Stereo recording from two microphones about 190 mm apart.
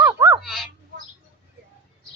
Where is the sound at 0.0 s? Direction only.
15° right (ahead or behind).